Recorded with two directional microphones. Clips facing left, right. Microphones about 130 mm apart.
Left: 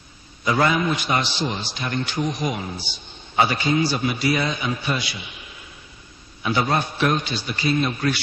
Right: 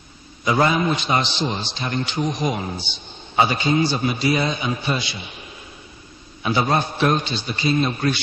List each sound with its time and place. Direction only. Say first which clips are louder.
0.5 s a man's voice: right 1 dB; 25° right (ahead or behind)
6.4 s a man's voice: right 2 dB; 25° right (ahead or behind)